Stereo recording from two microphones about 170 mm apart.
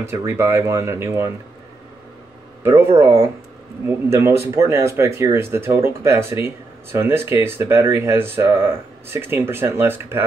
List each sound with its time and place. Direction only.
0.0 s speech: 15° right (ahead or behind)
2.6 s speech: 15° right (ahead or behind)